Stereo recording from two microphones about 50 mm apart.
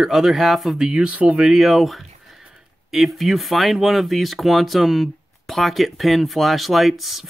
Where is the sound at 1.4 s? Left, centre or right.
Centre.